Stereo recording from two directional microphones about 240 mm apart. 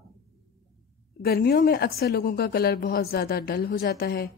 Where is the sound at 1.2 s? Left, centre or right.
Left.